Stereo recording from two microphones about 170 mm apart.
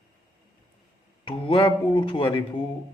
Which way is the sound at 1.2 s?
30° left (ahead or behind).